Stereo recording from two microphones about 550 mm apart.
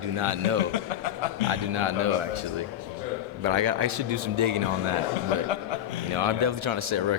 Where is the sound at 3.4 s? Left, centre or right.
Right.